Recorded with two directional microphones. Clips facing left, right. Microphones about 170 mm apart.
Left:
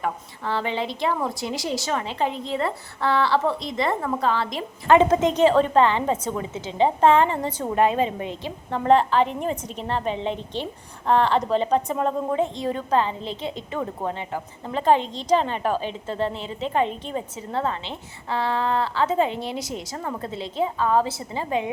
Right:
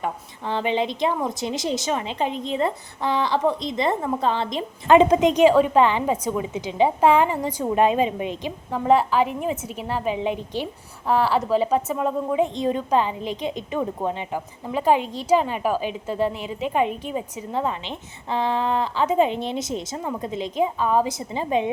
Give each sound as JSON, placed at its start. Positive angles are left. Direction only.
{"t": 0.0, "sound": "a woman's voice", "side_deg": -20}
{"t": 12.5, "sound": "a woman's voice", "side_deg": -20}